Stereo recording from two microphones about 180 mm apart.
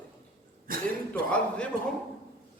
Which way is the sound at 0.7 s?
50° right (ahead or behind).